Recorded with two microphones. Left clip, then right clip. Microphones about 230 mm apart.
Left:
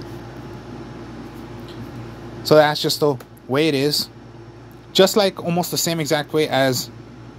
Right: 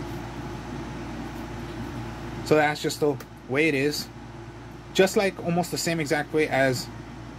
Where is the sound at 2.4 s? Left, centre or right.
Left.